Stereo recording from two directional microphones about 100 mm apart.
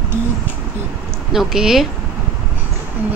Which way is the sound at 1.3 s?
5° right (ahead or behind).